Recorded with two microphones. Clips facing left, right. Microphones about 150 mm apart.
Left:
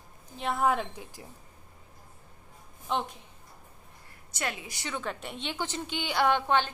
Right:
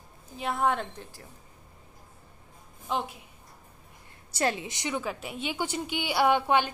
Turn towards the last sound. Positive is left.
turn(degrees=-10)  # may be behind; listen again after turning